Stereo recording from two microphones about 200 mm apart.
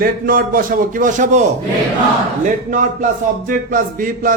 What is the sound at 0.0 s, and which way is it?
A man's voice, 45° right (ahead or behind).